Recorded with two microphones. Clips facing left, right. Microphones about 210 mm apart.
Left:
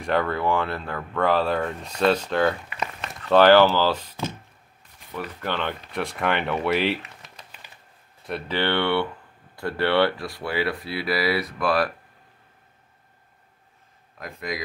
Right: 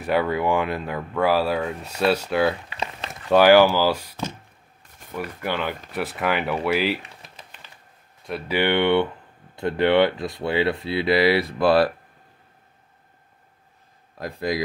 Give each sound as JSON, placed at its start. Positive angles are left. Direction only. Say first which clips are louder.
{"t": 0.0, "sound": "speech", "louder": "right 2 dB", "side_deg": -10}
{"t": 2.7, "sound": "a sound", "louder": "even", "side_deg": -30}
{"t": 3.3, "sound": "speech", "louder": "right 1 dB", "side_deg": -10}
{"t": 8.5, "sound": "speech", "louder": "right 4 dB", "side_deg": -15}
{"t": 14.1, "sound": "speech", "louder": "right 6 dB", "side_deg": -35}